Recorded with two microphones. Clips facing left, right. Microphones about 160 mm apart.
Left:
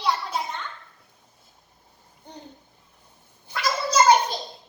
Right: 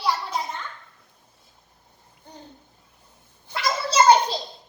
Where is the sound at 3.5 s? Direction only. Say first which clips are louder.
Left 1 dB; 30° right (ahead or behind).